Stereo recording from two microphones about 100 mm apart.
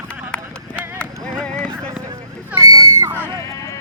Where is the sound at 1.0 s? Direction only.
10° left (ahead or behind).